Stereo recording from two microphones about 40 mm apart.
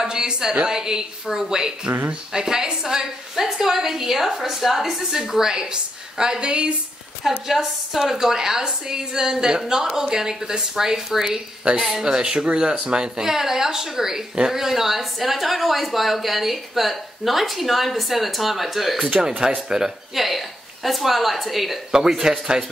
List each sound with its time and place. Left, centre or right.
0.0 s a woman's voice: centre
1.9 s speech: right
2.3 s a woman's voice: centre
7.2 s a woman's voice: centre; by 13.2 s right
13.2 s a woman's voice: centre
19.4 s a woman's voice: centre
20.2 s speech: centre
21.9 s a woman's voice: centre